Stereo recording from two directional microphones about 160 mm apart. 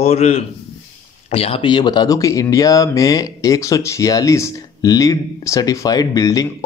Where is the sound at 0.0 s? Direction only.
45° left (ahead or behind).